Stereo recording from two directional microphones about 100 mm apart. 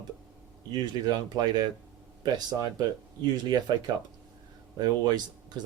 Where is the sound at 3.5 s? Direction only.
45° right (ahead or behind).